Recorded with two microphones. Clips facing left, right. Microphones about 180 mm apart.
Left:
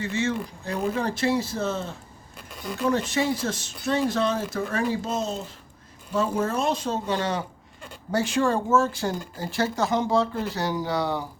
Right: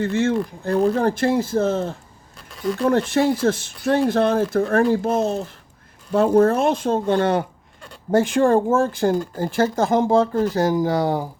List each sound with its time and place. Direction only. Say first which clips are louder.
0.0 s speech: right 7 dB; 55° right (ahead or behind)